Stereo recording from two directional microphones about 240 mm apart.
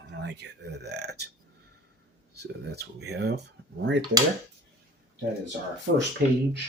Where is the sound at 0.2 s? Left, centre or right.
Right.